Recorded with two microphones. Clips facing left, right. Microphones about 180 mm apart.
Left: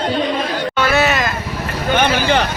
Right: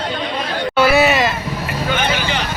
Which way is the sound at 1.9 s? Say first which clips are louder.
Left 7 dB; 55° left (ahead or behind).